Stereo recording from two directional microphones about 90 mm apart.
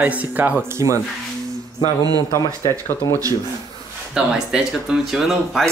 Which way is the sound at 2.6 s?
40° left (ahead or behind).